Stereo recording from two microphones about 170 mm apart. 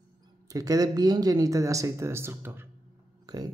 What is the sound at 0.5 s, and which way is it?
Speech, 20° right (ahead or behind).